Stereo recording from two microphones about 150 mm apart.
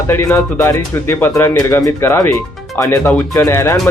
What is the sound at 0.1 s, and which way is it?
Speech, 15° left (ahead or behind).